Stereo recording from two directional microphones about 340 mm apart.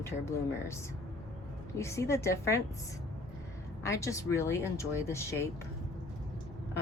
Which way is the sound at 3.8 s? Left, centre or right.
Centre.